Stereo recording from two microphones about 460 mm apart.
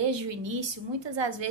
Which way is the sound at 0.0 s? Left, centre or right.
Right.